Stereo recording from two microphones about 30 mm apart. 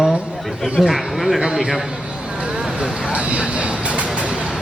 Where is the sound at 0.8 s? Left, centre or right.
Centre.